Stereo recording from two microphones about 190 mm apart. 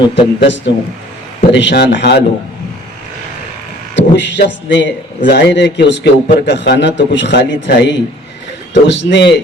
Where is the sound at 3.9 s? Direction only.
65° left (ahead or behind).